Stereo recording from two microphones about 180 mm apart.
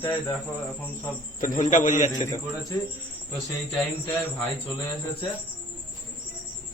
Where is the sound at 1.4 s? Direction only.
50° left (ahead or behind).